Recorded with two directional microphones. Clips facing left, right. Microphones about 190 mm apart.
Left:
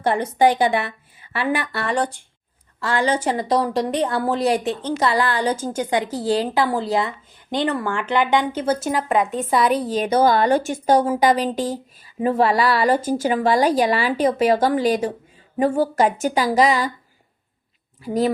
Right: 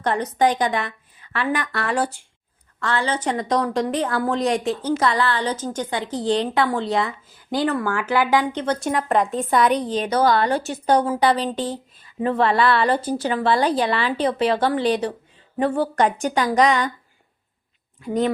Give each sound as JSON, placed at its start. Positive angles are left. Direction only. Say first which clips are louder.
{"t": 0.0, "sound": "a woman's voice", "louder": "left 2 dB", "side_deg": 10}
{"t": 2.8, "sound": "a woman's voice", "louder": "left 3 dB", "side_deg": 10}
{"t": 4.8, "sound": "a woman's voice", "louder": "right 1 dB", "side_deg": -10}
{"t": 5.0, "sound": "a woman's voice", "louder": "left 4 dB", "side_deg": 10}
{"t": 8.5, "sound": "a woman's voice", "louder": "left 1 dB", "side_deg": 5}
{"t": 10.6, "sound": "a woman's voice", "louder": "left 2 dB", "side_deg": 50}
{"t": 10.9, "sound": "speech", "louder": "left 1 dB", "side_deg": 10}
{"t": 18.0, "sound": "a woman's voice", "louder": "left 1 dB", "side_deg": 5}